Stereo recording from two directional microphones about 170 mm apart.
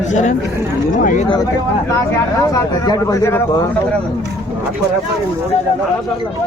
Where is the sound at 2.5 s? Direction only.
20° left (ahead or behind).